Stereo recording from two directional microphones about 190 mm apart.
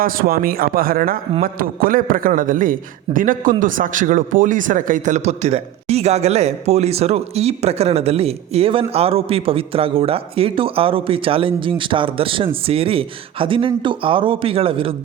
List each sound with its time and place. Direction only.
0.0 s a man's voice: 50° right (ahead or behind); by 14.9 s 30° right (ahead or behind)